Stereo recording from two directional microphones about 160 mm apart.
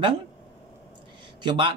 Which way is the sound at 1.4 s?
30° right (ahead or behind).